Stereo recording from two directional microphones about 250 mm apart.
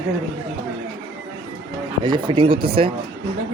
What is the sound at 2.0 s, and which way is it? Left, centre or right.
Speech, centre.